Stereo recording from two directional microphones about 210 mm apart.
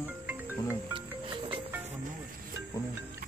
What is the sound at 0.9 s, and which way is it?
Music, 25° right (ahead or behind).